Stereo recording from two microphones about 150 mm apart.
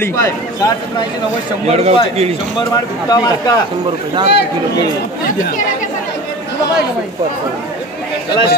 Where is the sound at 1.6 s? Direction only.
45° right (ahead or behind).